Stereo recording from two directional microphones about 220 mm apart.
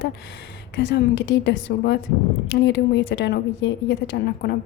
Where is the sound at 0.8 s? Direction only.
50° left (ahead or behind).